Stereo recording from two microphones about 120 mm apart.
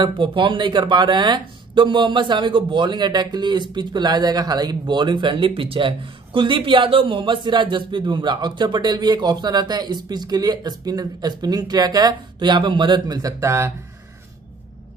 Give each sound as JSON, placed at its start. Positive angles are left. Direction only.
{"t": 0.0, "sound": "speech", "side_deg": -45}